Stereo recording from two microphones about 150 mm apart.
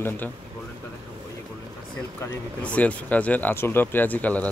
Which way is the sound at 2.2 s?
10° left (ahead or behind).